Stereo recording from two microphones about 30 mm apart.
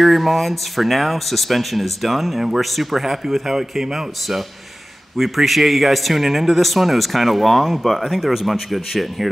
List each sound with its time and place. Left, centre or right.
0.0 s speech: centre
5.1 s speech: centre
8.2 s speech: centre